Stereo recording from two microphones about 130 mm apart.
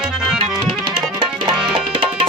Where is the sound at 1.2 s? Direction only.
40° right (ahead or behind).